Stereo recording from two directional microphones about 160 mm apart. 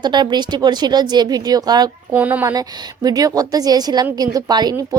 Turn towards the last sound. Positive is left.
turn(degrees=-25)  # may be behind; listen again after turning